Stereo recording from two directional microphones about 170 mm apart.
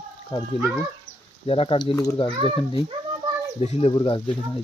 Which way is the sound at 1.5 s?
35° left (ahead or behind).